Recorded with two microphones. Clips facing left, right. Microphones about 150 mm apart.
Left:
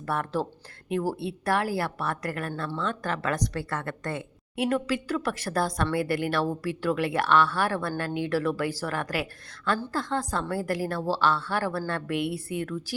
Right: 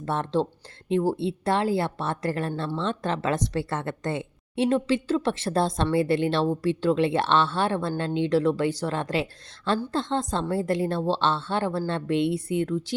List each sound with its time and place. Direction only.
0.0 s speech: 20° right (ahead or behind)
2.5 s speech: 15° right (ahead or behind)